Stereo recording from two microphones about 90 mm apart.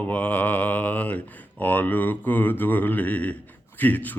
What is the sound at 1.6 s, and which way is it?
Speech, 20° left (ahead or behind).